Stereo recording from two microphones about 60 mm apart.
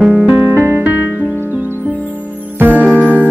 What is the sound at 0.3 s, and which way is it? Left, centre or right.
Music, right.